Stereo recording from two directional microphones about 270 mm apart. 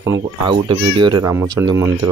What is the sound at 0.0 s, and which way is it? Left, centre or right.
Speech, centre.